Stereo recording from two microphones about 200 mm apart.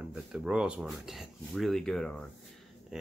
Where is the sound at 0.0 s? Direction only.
5° right (ahead or behind).